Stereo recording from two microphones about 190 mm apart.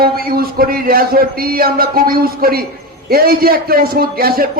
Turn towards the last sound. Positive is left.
turn(degrees=-50)  # may be behind; listen again after turning